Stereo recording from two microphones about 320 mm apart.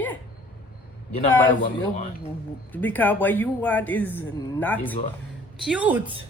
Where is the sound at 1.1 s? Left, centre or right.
Centre.